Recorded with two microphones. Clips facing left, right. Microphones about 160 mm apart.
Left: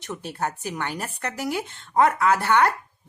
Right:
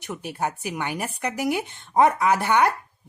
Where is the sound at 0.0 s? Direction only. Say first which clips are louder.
Right 1 dB; 15° right (ahead or behind).